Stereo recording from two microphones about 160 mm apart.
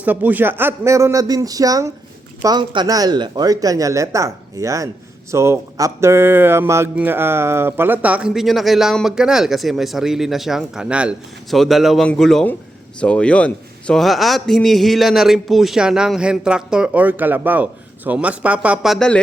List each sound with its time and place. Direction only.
0.0 s a man's voice: 10° right (ahead or behind)